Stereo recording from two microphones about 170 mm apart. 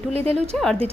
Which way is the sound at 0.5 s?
5° left (ahead or behind).